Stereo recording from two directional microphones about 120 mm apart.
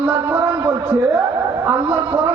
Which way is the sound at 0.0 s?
15° right (ahead or behind).